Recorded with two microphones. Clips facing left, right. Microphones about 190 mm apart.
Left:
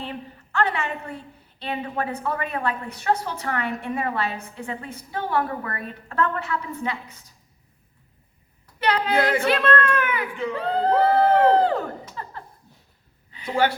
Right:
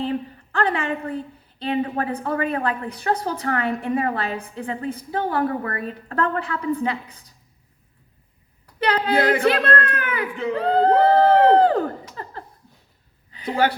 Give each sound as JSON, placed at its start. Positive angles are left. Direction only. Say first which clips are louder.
{"t": 0.0, "sound": "a woman's voice", "louder": "right 9 dB", "side_deg": -35}
{"t": 8.8, "sound": "speech", "louder": "right 2 dB", "side_deg": -35}